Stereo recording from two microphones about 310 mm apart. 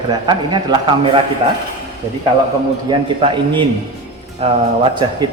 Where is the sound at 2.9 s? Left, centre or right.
Centre.